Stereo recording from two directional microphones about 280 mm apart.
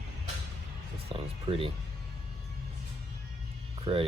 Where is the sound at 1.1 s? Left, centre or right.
Right.